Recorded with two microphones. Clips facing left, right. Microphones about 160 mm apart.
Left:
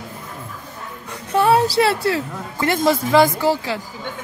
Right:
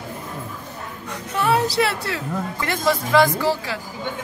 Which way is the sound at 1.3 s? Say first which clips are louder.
Left 5 dB; 30° left (ahead or behind).